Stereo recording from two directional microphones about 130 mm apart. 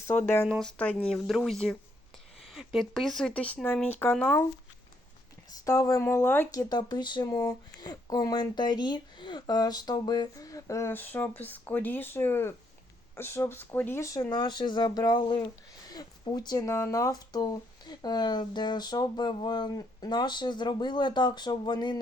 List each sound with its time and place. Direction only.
0.6 s speech: 10° left (ahead or behind)
5.5 s speech: 25° left (ahead or behind)
6.5 s speech: 30° left (ahead or behind)
14.3 s speech: 35° left (ahead or behind)